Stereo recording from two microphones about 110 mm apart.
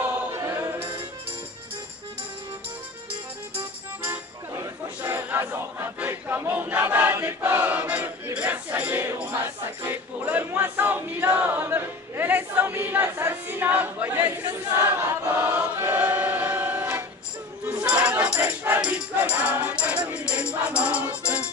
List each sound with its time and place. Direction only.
0.0 s choir: 25° right (ahead or behind)
4.0 s music: 20° right (ahead or behind)
17.6 s a sound: 10° right (ahead or behind)
18.4 s music: 20° right (ahead or behind)